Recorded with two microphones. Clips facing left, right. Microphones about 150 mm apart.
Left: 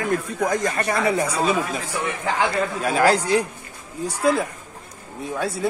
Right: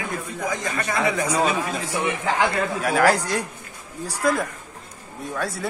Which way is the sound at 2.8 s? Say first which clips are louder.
Even; centre (ahead or behind).